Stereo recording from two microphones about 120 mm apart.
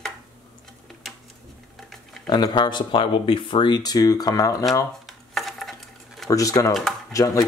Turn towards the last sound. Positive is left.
turn(degrees=25)  # may be behind; listen again after turning